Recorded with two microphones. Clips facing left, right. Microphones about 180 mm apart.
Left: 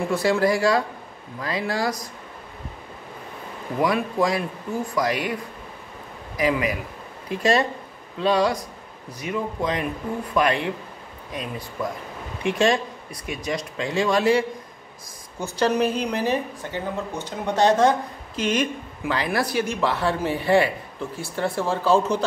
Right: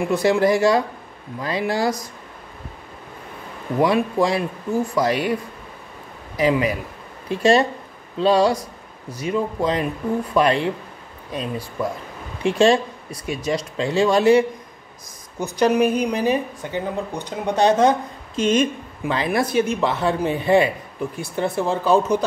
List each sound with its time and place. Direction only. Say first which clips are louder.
0.0 s speech: right 3 dB; 20° right (ahead or behind)
3.8 s speech: right 3 dB; 25° right (ahead or behind)
6.3 s speech: right 4 dB; 30° right (ahead or behind)
12.4 s speech: right 5 dB; 25° right (ahead or behind)